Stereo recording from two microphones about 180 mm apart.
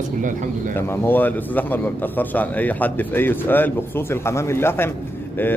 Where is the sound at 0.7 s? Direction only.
10° left (ahead or behind).